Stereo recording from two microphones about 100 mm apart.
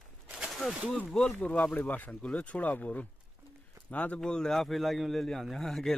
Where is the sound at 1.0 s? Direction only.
5° left (ahead or behind).